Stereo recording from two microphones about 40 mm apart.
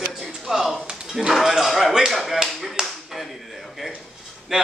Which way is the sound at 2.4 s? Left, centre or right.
Centre.